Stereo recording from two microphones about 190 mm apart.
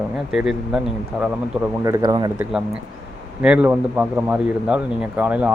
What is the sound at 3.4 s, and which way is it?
Speech, 5° right (ahead or behind).